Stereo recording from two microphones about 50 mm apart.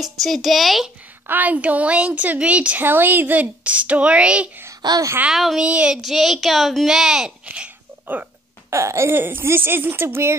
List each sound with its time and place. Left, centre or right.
0.0 s a woman's voice: centre
1.2 s a woman's voice: right
2.8 s a woman's voice: right
3.6 s a woman's voice: right
5.3 s a woman's voice: centre
5.6 s a woman's voice: right
5.9 s a woman's voice: centre
7.4 s babbling: right
8.6 s speech: right
9.1 s speech: right